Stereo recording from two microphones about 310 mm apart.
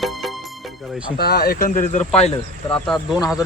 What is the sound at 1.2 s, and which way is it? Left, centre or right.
Speech, left.